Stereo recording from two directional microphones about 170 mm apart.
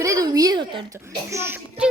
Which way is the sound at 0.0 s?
20° right (ahead or behind).